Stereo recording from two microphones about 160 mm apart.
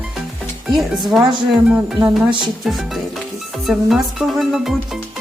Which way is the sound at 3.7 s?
Centre (ahead or behind).